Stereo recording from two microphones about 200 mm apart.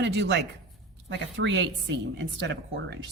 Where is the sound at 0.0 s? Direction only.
60° right (ahead or behind).